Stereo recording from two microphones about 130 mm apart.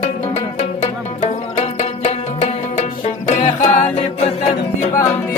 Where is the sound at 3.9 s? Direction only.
50° left (ahead or behind).